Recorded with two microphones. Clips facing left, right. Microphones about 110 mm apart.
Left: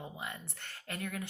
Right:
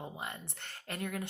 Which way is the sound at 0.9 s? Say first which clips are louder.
Right 2 dB; 40° right (ahead or behind).